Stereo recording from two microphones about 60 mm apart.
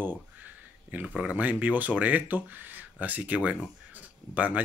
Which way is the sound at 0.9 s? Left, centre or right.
Centre.